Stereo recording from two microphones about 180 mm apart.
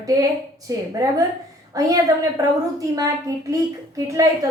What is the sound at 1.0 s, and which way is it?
Speech, 20° right (ahead or behind).